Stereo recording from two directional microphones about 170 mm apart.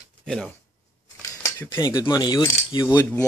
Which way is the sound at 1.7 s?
25° left (ahead or behind).